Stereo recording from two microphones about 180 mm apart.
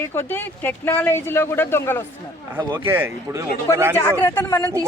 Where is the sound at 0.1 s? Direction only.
10° left (ahead or behind).